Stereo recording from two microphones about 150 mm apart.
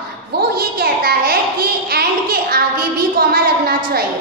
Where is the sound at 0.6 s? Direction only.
90° right.